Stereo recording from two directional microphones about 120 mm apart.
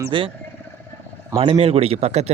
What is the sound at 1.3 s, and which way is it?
Speech, 50° right (ahead or behind).